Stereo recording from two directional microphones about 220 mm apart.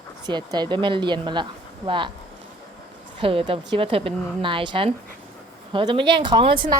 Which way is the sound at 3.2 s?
25° right (ahead or behind).